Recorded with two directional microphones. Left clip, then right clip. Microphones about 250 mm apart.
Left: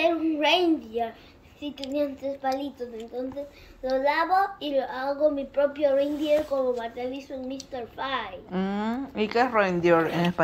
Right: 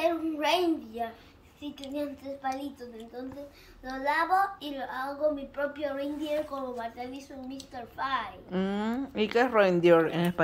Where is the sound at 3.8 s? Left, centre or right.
Centre.